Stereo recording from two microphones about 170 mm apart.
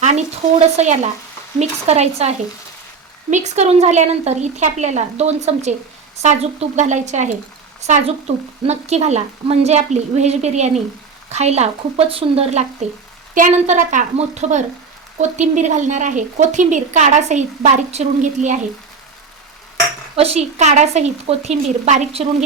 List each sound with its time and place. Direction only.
0.0 s a woman's voice: 45° right (ahead or behind)
8.6 s a woman's voice: 40° right (ahead or behind)
13.3 s speech: 50° right (ahead or behind)
20.1 s a woman's voice: 35° right (ahead or behind)